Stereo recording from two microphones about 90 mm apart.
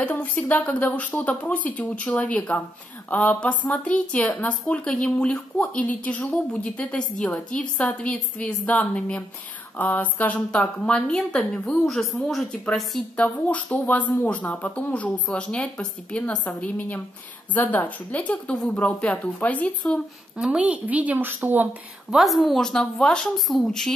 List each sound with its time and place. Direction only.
0.0 s speech: 15° left (ahead or behind)
13.1 s speech: 15° left (ahead or behind)
20.3 s a woman's voice: 10° right (ahead or behind)
22.1 s speech: centre (ahead or behind)